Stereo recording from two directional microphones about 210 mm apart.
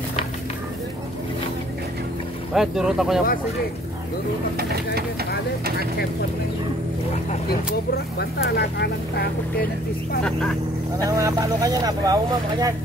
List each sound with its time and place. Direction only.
2.5 s speech: centre (ahead or behind)
4.6 s speech: 50° right (ahead or behind)
5.3 s speech: 50° left (ahead or behind)
7.9 s speech: 50° left (ahead or behind)
11.1 s speech: 15° right (ahead or behind)